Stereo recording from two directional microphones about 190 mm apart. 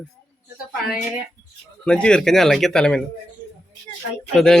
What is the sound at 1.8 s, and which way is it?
A man's voice, 5° left (ahead or behind).